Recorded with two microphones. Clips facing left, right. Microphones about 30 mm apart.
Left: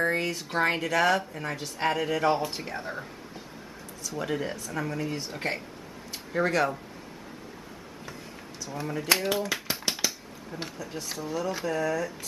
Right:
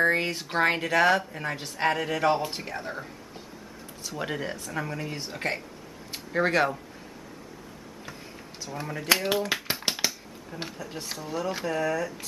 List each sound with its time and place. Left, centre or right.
0.0 s speech: right; by 3.1 s centre
4.1 s speech: centre
6.4 s speech: right
8.7 s speech: centre
9.4 s a sound: right
10.5 s speech: centre
11.0 s speech: right
11.2 s speech: centre